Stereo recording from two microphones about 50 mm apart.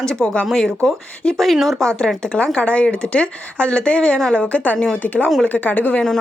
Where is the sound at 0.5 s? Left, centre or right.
Centre.